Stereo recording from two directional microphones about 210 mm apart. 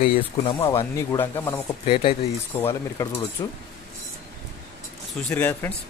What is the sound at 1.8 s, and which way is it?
Speech, 25° left (ahead or behind).